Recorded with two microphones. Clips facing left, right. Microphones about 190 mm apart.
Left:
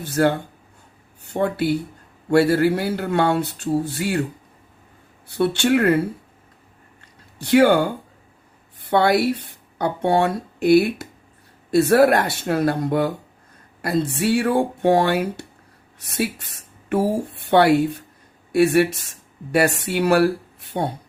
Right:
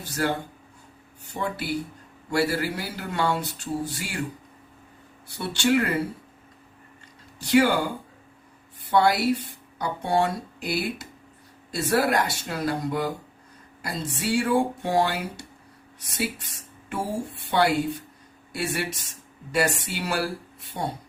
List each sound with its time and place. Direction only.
0.0 s speech: 55° left (ahead or behind)
5.4 s speech: 60° left (ahead or behind)
7.3 s speech: 60° left (ahead or behind)
8.9 s speech: 60° left (ahead or behind)